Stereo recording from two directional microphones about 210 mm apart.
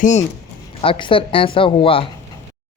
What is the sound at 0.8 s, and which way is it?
Speech, 25° left (ahead or behind).